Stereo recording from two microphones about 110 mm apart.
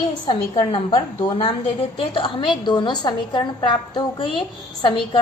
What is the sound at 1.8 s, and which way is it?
A woman's voice, 55° left (ahead or behind).